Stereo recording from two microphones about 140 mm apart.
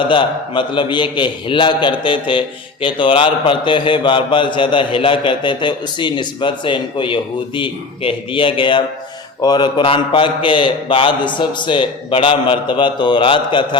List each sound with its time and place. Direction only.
0.0 s a man's voice: 35° left (ahead or behind)